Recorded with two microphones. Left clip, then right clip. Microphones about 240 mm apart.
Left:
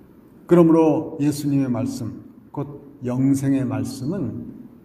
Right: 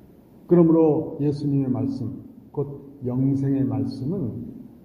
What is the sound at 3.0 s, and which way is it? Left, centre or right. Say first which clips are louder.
A man's voice: left 4 dB; left.